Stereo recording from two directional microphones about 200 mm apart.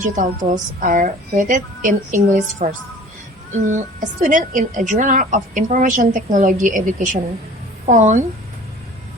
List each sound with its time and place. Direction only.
0.0 s a woman's voice: 40° right (ahead or behind)
3.8 s a woman's voice: 40° right (ahead or behind)